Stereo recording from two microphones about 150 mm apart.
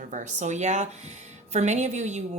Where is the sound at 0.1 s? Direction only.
55° right (ahead or behind).